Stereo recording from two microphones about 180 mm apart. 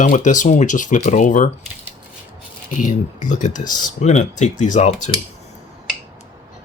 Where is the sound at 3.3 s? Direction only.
45° left (ahead or behind).